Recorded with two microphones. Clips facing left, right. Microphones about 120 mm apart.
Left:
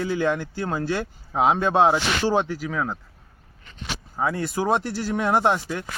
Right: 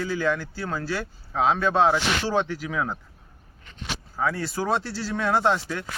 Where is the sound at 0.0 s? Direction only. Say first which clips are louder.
Left 2 dB; 20° left (ahead or behind).